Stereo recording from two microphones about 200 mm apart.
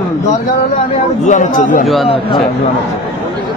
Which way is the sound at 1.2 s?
40° left (ahead or behind).